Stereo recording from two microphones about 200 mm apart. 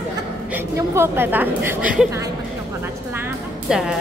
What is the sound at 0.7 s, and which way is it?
A woman's voice, 10° right (ahead or behind).